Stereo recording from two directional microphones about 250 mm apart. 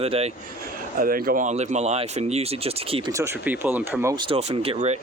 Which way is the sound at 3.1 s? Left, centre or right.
Centre.